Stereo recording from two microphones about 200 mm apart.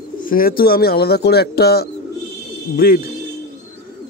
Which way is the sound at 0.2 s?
45° left (ahead or behind).